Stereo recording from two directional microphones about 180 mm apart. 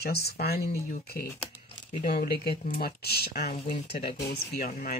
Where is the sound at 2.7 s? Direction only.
55° left (ahead or behind).